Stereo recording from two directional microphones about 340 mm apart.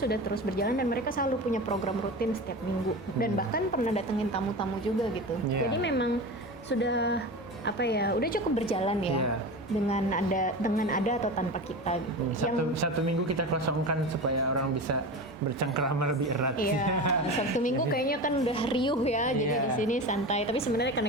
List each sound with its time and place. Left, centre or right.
0.0 s a woman's voice: left
3.2 s a woman's voice: left
5.7 s a woman's voice: left
12.5 s a woman's voice: right
15.6 s speech: right
17.6 s a woman's voice: left
20.8 s speech: left